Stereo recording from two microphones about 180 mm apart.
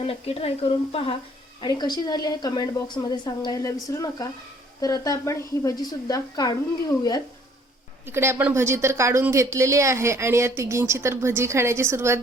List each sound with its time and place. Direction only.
0.0 s a woman's voice: 35° left (ahead or behind)
8.0 s a woman's voice: 15° right (ahead or behind)